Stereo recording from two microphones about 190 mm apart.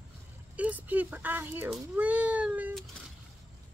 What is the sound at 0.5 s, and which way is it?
Speech, 10° right (ahead or behind).